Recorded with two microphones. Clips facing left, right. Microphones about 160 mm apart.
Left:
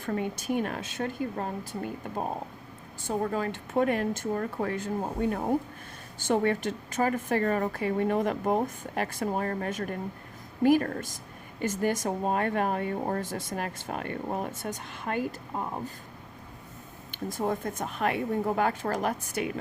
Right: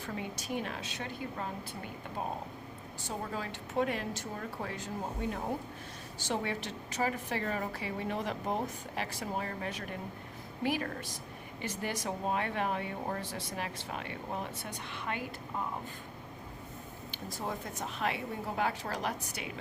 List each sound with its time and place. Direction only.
0.0 s speech: 50° left (ahead or behind)
17.1 s speech: 50° left (ahead or behind)